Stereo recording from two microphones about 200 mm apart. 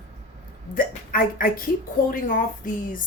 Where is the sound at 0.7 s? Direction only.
45° left (ahead or behind).